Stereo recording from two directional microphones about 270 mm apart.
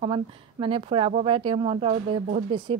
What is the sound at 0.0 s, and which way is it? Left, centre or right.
Speech, centre.